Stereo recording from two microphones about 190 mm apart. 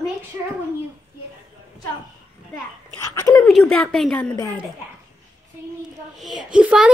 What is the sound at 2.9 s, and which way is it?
Dog, 15° left (ahead or behind).